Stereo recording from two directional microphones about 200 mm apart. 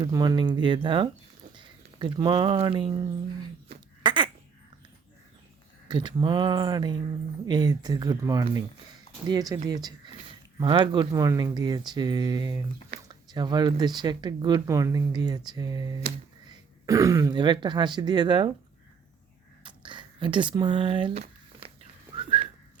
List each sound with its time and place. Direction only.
0.0 s speech: 20° right (ahead or behind)
3.7 s duck: 25° right (ahead or behind)
5.9 s speech: 20° right (ahead or behind)
19.6 s a sound: 25° right (ahead or behind)